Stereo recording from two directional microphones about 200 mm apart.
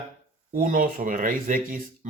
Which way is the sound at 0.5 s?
40° right (ahead or behind).